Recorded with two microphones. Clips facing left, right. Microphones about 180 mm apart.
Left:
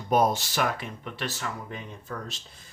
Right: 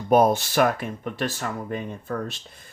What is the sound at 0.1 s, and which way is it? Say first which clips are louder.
Speech: right 5 dB; 55° right (ahead or behind).